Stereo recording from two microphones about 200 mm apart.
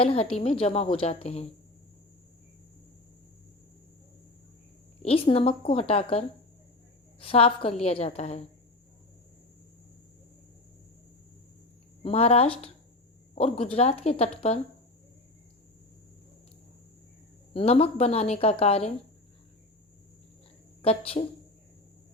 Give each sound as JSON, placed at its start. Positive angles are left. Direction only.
{"t": 0.0, "sound": "a woman's voice", "side_deg": 30}
{"t": 5.0, "sound": "a woman's voice", "side_deg": 30}
{"t": 12.0, "sound": "a woman's voice", "side_deg": 30}
{"t": 17.5, "sound": "a woman's voice", "side_deg": 30}
{"t": 20.8, "sound": "speech", "side_deg": 30}